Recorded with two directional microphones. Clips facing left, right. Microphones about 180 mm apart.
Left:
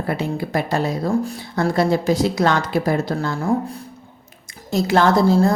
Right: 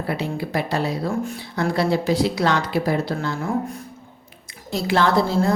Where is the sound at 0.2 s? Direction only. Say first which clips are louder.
Left 2 dB; 50° left (ahead or behind).